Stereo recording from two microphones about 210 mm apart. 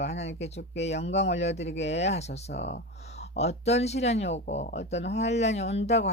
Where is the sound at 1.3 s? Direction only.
55° left (ahead or behind).